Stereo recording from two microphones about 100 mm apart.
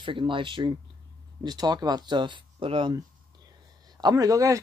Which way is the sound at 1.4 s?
45° right (ahead or behind).